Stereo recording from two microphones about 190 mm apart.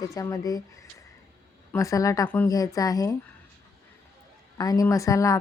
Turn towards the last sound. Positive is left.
turn(degrees=15)  # may be behind; listen again after turning